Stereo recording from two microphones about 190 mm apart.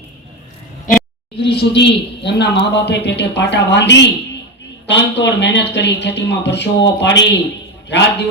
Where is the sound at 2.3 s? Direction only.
65° left (ahead or behind).